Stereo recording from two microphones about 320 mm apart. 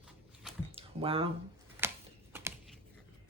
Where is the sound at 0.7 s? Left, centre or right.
Centre.